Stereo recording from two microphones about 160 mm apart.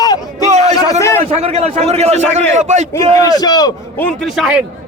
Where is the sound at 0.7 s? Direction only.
20° left (ahead or behind).